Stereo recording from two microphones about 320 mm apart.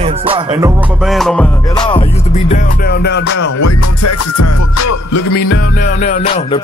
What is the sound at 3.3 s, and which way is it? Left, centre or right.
Music, left.